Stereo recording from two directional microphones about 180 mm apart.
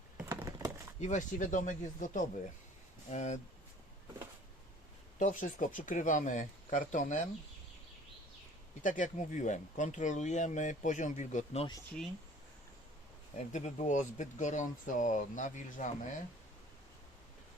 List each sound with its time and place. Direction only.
0.2 s computer keyboard: 15° right (ahead or behind)
0.9 s speech: 40° left (ahead or behind)
5.2 s speech: 45° left (ahead or behind)
8.8 s speech: 45° left (ahead or behind)
13.3 s speech: 40° left (ahead or behind)